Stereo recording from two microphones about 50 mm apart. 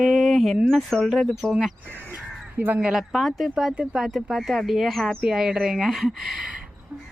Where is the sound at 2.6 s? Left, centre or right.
Right.